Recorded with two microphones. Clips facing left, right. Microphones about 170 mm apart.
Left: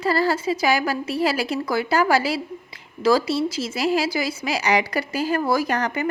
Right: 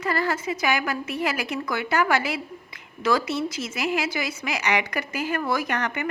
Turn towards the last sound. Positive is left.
turn(degrees=35)  # may be behind; listen again after turning